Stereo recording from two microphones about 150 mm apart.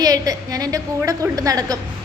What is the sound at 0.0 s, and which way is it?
A woman's voice, 25° right (ahead or behind).